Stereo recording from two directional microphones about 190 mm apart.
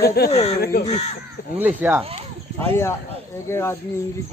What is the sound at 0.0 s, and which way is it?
Speech, 55° left (ahead or behind).